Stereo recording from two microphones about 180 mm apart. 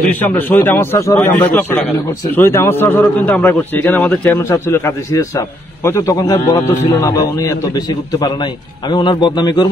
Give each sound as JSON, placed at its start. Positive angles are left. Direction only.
{"t": 0.1, "sound": "a man's voice", "side_deg": 10}